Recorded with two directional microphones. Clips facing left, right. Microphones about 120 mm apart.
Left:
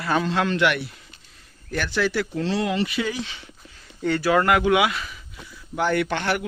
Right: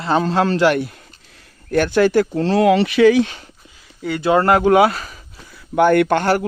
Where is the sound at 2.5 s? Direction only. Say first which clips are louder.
Right 13 dB; 70° right (ahead or behind).